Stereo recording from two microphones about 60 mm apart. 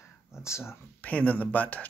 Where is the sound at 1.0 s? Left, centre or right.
Left.